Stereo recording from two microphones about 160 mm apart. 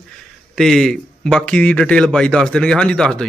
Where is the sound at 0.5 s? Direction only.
Centre (ahead or behind).